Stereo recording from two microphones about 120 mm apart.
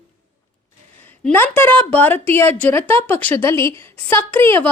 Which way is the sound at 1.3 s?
15° left (ahead or behind).